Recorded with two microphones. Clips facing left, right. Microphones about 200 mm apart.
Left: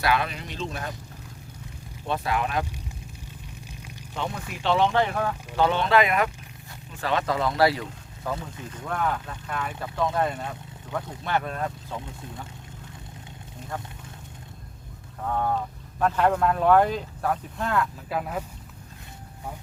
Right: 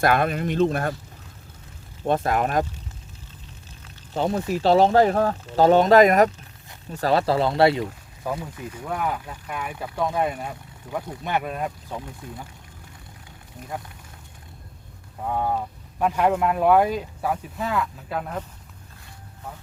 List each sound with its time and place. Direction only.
0.0 s speech: 50° right (ahead or behind)
2.0 s speech: 45° right (ahead or behind)
4.1 s speech: 35° right (ahead or behind)
8.2 s speech: 10° right (ahead or behind)
15.2 s speech: 15° right (ahead or behind); by 18.4 s 5° left (ahead or behind)